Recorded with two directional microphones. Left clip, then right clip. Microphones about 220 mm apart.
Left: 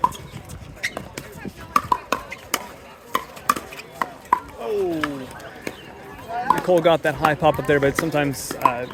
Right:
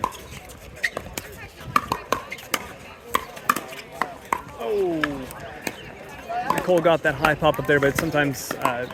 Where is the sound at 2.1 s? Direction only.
Centre (ahead or behind).